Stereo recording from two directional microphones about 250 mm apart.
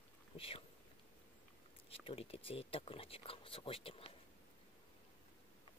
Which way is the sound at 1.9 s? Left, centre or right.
Left.